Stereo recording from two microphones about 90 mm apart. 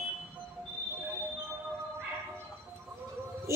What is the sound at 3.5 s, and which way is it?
Music, 30° right (ahead or behind).